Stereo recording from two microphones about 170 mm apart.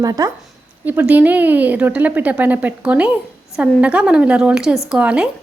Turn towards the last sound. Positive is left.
turn(degrees=-5)  # may be behind; listen again after turning